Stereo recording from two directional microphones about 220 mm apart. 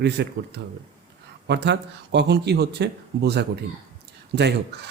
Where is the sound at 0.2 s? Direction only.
50° right (ahead or behind).